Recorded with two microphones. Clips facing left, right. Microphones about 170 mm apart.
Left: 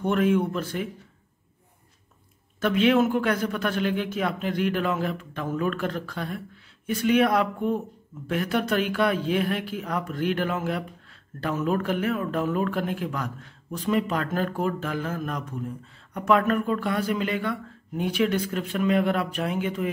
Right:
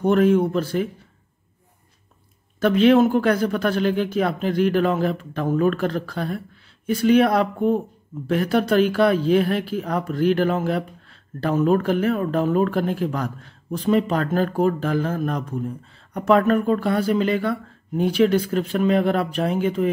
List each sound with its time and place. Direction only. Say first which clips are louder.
0.0 s speech: right 5 dB; 35° right (ahead or behind)
2.6 s speech: right 5 dB; 35° right (ahead or behind)